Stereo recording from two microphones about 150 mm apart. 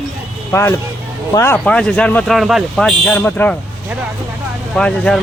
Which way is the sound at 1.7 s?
5° left (ahead or behind).